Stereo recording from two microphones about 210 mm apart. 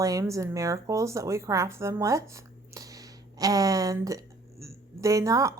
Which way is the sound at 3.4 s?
15° right (ahead or behind).